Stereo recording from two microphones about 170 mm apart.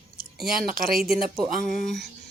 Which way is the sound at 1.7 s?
Centre (ahead or behind).